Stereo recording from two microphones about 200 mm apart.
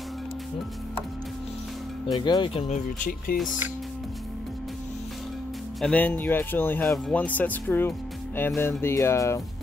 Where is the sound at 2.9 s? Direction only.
45° left (ahead or behind).